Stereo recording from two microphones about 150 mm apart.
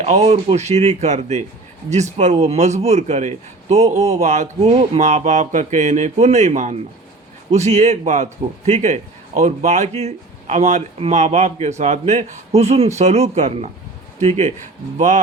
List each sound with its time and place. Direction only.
0.0 s a man's voice: 45° right (ahead or behind)